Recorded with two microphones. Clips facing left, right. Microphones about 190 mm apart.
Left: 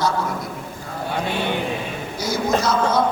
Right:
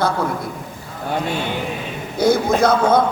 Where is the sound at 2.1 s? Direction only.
55° right (ahead or behind).